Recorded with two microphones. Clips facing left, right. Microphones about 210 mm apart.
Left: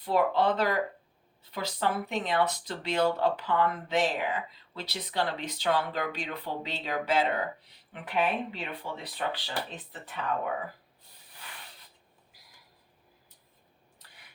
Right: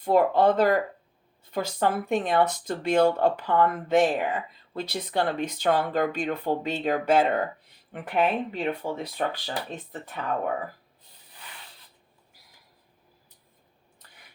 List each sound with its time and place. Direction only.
0.0 s speech: 50° right (ahead or behind)